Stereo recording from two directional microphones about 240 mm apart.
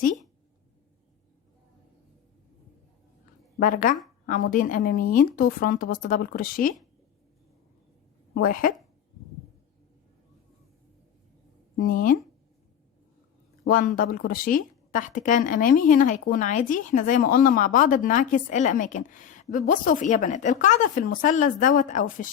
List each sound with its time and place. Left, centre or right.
3.6 s speech: left
8.3 s a woman's voice: left
11.8 s speech: left
13.7 s speech: left